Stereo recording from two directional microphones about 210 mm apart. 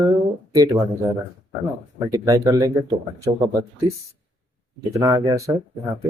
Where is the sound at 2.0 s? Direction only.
15° right (ahead or behind).